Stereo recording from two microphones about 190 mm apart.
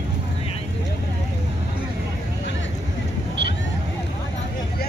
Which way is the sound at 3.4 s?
65° right (ahead or behind).